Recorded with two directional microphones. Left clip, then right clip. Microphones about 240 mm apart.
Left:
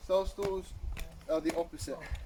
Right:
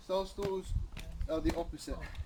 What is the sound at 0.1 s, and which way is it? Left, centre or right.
Speech, centre.